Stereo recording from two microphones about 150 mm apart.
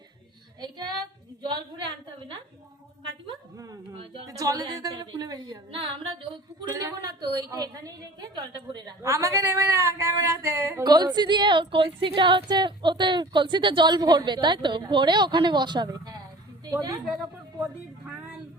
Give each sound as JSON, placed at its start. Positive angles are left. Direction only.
{"t": 4.3, "sound": "speech", "side_deg": -20}
{"t": 6.7, "sound": "speech", "side_deg": -20}
{"t": 10.8, "sound": "a woman's voice", "side_deg": -25}